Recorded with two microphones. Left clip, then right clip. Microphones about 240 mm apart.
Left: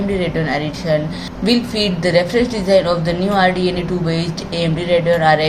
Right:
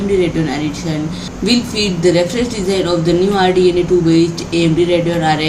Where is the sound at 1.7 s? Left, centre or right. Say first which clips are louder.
Right 3 dB; left.